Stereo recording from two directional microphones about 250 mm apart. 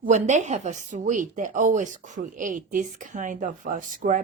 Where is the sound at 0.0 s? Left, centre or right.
Right.